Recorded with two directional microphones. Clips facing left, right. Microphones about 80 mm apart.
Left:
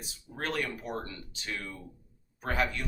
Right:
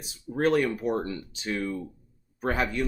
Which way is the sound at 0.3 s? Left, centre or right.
Right.